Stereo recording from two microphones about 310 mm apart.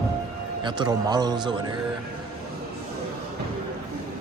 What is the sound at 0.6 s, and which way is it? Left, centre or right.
Speech, centre.